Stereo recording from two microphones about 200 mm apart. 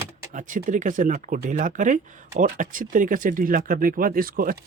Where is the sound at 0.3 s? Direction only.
40° right (ahead or behind).